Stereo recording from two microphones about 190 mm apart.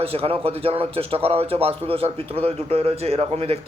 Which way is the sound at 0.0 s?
30° right (ahead or behind).